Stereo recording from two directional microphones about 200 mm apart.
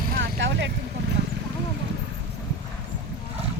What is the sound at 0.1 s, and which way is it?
Vehicle, 60° right (ahead or behind).